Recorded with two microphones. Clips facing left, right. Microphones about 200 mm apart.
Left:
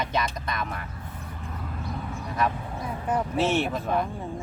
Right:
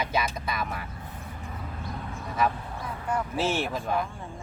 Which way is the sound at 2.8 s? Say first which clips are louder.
Left 3 dB; 20° left (ahead or behind).